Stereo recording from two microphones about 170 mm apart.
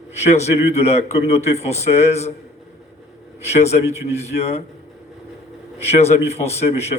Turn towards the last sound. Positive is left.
turn(degrees=40)  # may be behind; listen again after turning